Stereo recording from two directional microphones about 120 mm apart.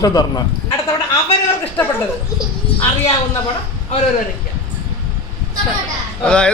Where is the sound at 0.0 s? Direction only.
35° left (ahead or behind).